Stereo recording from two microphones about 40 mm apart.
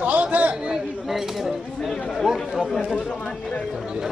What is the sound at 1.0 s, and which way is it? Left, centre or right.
Speech, centre.